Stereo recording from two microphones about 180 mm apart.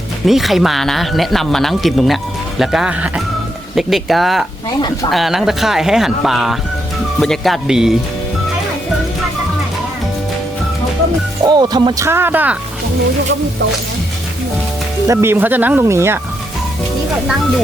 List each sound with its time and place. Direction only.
0.3 s speech: centre (ahead or behind)
11.4 s speech: 25° right (ahead or behind)
15.0 s speech: 15° right (ahead or behind)